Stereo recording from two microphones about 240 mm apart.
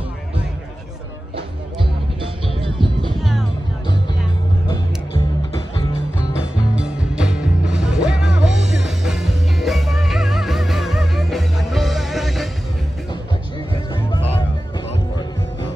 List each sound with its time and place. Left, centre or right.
2.6 s music: right
3.2 s music: centre
4.6 s music: centre
6.7 s music: centre